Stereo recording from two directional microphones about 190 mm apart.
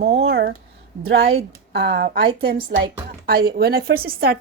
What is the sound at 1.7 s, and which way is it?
Speech, 60° right (ahead or behind).